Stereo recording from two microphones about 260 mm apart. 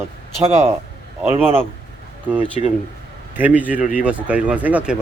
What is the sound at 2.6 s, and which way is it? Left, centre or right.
Speech, left.